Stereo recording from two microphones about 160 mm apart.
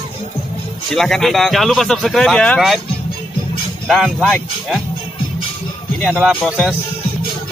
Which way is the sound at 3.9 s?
Centre (ahead or behind).